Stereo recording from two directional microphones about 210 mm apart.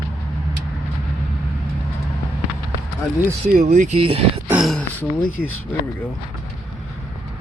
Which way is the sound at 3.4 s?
40° right (ahead or behind).